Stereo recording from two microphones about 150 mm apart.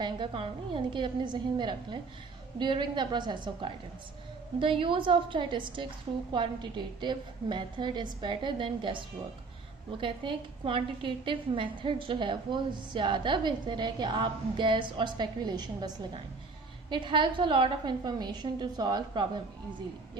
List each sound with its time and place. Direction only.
0.0 s a woman's voice: 35° right (ahead or behind)
16.9 s a woman's voice: 35° right (ahead or behind)